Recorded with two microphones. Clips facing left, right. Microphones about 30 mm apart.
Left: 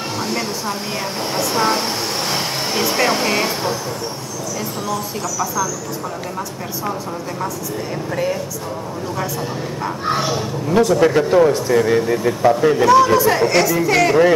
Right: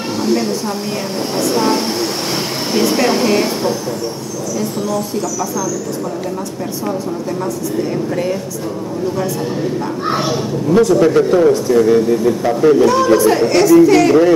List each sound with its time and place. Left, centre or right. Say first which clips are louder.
0.2 s speech: right 8 dB; centre
10.0 s speech: right 1 dB; centre
10.7 s speech: right 3 dB; centre
12.9 s speech: right 1 dB; centre